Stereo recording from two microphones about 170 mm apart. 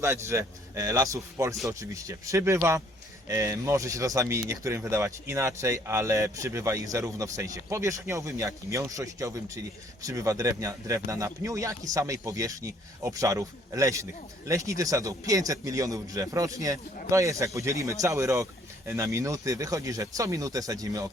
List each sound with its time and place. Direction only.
0.0 s speech: 15° right (ahead or behind)